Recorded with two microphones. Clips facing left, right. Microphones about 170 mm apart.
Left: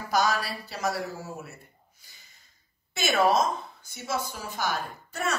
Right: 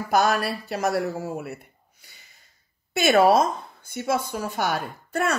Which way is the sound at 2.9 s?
65° right (ahead or behind).